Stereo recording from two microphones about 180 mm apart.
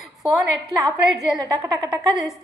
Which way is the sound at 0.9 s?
Centre (ahead or behind).